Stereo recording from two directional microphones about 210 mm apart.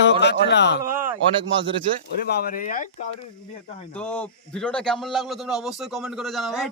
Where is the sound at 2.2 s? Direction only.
45° left (ahead or behind).